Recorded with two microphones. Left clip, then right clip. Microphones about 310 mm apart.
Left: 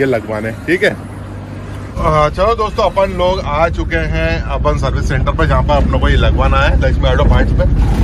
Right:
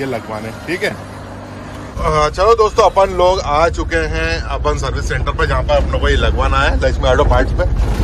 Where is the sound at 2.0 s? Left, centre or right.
Centre.